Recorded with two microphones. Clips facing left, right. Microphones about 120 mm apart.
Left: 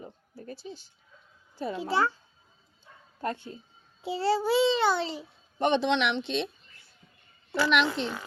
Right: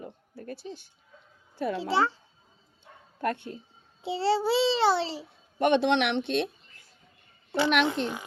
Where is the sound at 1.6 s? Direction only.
70° right (ahead or behind).